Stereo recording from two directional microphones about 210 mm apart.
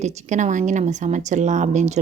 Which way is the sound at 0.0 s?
35° right (ahead or behind).